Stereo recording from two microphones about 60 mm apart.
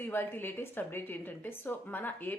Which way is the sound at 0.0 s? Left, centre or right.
Left.